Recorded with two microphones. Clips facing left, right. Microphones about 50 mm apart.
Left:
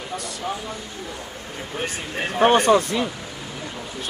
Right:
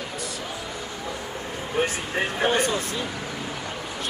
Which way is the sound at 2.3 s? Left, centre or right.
Left.